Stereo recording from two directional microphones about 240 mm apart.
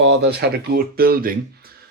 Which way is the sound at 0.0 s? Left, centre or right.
Right.